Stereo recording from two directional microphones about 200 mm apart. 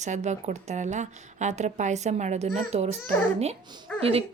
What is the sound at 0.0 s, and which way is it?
Speech, 35° right (ahead or behind).